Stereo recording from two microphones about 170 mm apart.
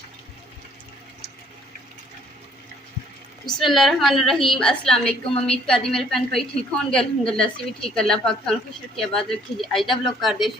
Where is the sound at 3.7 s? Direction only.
Centre (ahead or behind).